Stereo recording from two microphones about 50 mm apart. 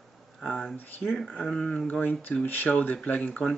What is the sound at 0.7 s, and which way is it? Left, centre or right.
Speech, left.